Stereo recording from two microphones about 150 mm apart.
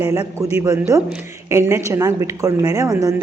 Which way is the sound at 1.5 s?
20° right (ahead or behind).